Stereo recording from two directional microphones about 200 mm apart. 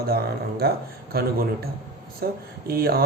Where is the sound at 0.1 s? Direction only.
50° right (ahead or behind).